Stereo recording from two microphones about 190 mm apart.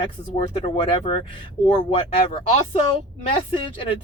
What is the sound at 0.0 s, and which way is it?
Speech, 30° left (ahead or behind).